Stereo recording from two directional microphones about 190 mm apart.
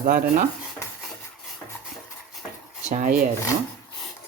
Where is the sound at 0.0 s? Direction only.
45° right (ahead or behind).